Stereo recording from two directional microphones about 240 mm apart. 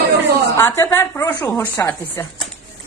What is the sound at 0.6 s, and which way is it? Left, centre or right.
A woman's voice, centre.